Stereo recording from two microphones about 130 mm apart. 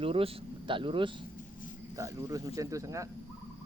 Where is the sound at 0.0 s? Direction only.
45° right (ahead or behind).